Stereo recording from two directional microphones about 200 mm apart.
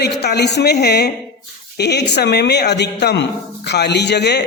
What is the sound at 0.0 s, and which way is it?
Speech, 55° left (ahead or behind).